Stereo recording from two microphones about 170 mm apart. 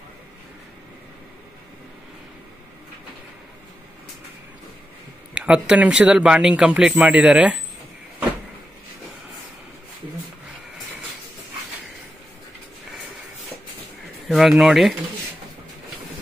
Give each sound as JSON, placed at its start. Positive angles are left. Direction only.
{"t": 5.3, "sound": "speech", "side_deg": -5}
{"t": 14.2, "sound": "a sound", "side_deg": 0}
{"t": 14.6, "sound": "speech", "side_deg": 0}